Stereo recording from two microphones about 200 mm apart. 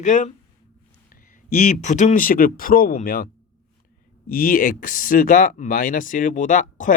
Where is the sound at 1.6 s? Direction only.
35° left (ahead or behind).